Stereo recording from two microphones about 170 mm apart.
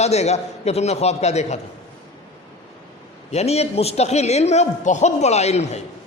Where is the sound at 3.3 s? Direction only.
40° left (ahead or behind).